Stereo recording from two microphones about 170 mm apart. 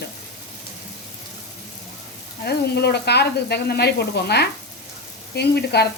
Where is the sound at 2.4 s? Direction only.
70° left (ahead or behind).